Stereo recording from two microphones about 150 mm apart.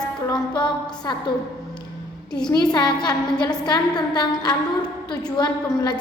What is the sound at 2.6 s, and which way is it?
A woman's voice, 30° left (ahead or behind).